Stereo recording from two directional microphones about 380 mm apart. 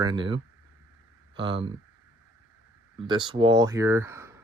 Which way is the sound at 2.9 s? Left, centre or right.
Centre.